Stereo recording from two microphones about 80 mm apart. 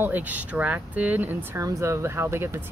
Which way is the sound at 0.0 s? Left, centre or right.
Right.